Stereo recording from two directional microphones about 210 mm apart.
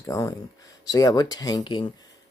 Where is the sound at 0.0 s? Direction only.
15° left (ahead or behind).